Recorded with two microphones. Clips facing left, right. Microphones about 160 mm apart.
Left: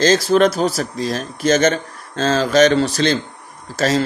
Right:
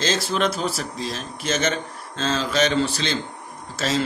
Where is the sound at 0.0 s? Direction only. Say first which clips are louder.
Left 9 dB; 45° left (ahead or behind).